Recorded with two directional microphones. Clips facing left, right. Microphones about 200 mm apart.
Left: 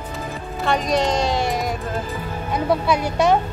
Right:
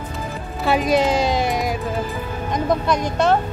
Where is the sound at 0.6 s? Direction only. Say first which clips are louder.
Right 3 dB; 5° right (ahead or behind).